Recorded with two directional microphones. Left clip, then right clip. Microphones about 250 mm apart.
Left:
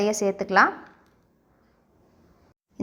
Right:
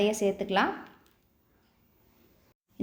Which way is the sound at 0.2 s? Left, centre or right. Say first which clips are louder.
Left 3 dB; centre.